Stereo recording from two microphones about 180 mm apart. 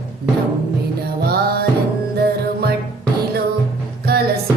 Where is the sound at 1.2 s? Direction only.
60° right (ahead or behind).